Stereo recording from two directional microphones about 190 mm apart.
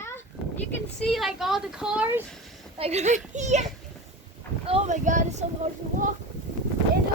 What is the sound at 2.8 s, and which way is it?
Speech, 35° right (ahead or behind).